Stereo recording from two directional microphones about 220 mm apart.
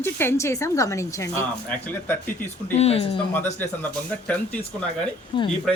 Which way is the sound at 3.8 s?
5° left (ahead or behind).